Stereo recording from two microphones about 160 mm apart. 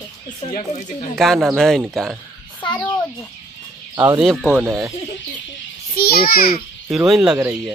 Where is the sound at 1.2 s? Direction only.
Centre (ahead or behind).